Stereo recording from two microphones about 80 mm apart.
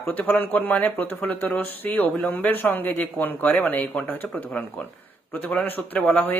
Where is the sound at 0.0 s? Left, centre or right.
Left.